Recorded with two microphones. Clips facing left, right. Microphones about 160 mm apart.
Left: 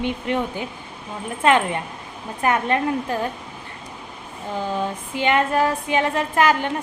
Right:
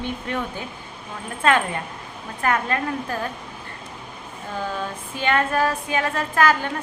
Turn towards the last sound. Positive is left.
turn(degrees=20)  # may be behind; listen again after turning